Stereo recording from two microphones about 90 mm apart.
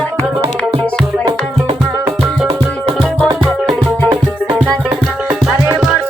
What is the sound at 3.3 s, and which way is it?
Music, 65° right (ahead or behind).